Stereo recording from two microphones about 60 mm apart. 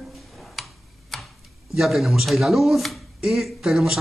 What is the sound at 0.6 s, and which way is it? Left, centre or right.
Tick-tock, centre.